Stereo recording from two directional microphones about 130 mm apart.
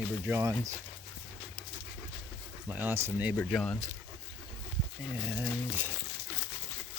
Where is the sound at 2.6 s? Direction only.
15° right (ahead or behind).